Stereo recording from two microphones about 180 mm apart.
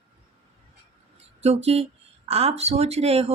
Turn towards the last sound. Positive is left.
turn(degrees=-35)  # may be behind; listen again after turning